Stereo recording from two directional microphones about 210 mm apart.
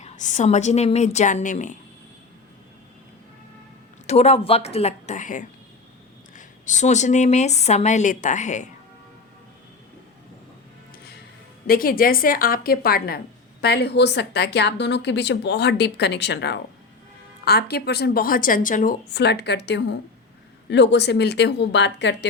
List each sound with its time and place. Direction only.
0.0 s a woman's voice: 35° left (ahead or behind)
4.0 s a woman's voice: 30° left (ahead or behind)
11.6 s a woman's voice: 45° left (ahead or behind)
19.1 s a woman's voice: 50° left (ahead or behind)